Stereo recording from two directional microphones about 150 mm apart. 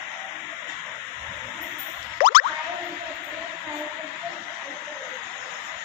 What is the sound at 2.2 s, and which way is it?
Music, 70° left (ahead or behind).